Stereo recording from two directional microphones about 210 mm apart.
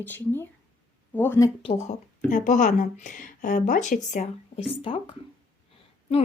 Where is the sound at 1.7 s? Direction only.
30° left (ahead or behind).